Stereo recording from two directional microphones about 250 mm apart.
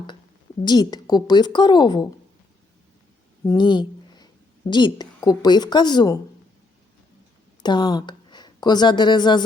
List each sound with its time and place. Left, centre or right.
0.6 s a woman's voice: centre
3.4 s a sound: centre
4.6 s a woman's voice: centre
7.6 s a woman's voice: centre